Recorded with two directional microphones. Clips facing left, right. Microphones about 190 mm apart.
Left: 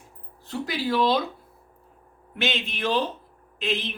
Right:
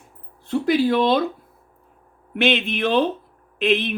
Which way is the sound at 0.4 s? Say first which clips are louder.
Right 10 dB; 55° right (ahead or behind).